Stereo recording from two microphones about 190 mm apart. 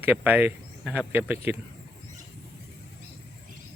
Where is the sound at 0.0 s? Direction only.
10° right (ahead or behind).